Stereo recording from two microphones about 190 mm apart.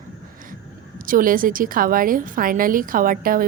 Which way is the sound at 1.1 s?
45° right (ahead or behind).